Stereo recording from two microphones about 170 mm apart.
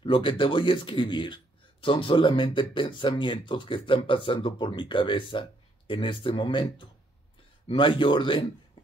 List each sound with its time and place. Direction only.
0.0 s a man's voice: 30° left (ahead or behind)